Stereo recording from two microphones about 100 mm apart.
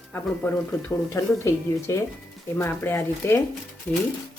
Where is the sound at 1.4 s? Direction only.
30° left (ahead or behind).